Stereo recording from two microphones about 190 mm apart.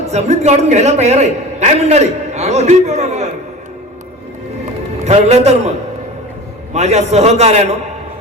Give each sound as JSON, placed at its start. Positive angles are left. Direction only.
{"t": 0.1, "sound": "a man's voice", "side_deg": -35}
{"t": 5.0, "sound": "a man's voice", "side_deg": -35}
{"t": 6.7, "sound": "a man's voice", "side_deg": -35}